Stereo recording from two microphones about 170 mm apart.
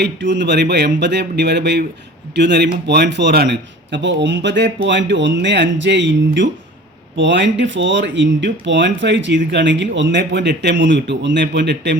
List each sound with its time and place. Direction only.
0.0 s speech: 90° right